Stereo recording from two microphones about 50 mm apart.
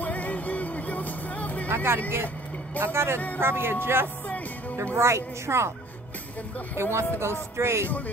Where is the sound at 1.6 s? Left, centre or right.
Right.